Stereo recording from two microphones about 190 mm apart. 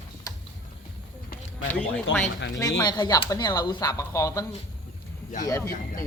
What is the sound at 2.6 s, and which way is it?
Speech, 20° left (ahead or behind).